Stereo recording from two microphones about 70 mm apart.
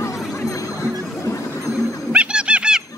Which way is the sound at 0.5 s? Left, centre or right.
Left.